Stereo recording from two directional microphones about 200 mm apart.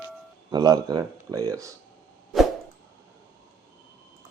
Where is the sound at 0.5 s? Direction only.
20° right (ahead or behind).